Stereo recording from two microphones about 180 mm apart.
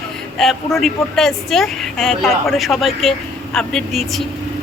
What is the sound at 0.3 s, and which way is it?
Speech, centre (ahead or behind).